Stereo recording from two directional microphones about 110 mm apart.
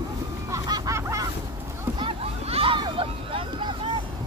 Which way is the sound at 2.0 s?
60° right (ahead or behind).